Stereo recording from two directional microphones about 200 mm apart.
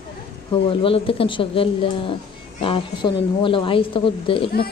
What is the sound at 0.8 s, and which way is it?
A woman's voice, 25° left (ahead or behind).